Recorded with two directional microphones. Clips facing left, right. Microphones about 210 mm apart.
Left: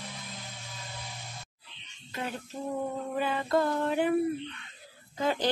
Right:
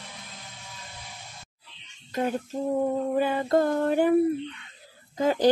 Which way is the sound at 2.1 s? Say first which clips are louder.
Right 9 dB; 45° right (ahead or behind).